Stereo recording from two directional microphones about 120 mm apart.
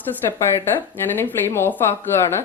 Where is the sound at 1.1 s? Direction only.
20° left (ahead or behind).